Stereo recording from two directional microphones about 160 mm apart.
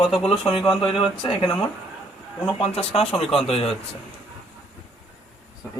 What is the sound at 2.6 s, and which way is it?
Speech, 40° left (ahead or behind).